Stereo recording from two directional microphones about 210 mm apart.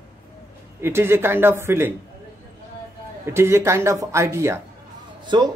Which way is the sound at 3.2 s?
10° right (ahead or behind).